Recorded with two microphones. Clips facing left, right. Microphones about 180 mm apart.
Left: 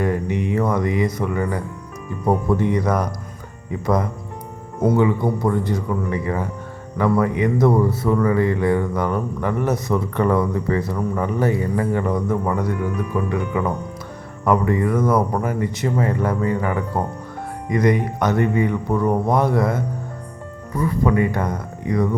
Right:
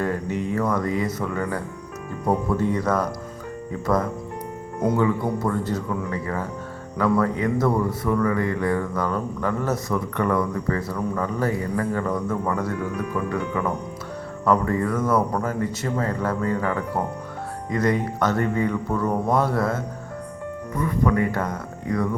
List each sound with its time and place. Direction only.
0.0 s mantra: 15° left (ahead or behind)
0.5 s speech: 20° left (ahead or behind)
8.0 s speech: 25° left (ahead or behind)
9.9 s speech: 30° left (ahead or behind)
21.0 s speech: 20° left (ahead or behind)